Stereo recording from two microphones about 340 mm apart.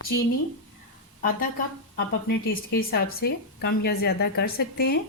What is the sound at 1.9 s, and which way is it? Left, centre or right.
Speech, left.